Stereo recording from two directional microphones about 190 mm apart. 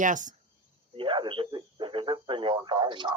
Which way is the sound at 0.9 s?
25° right (ahead or behind).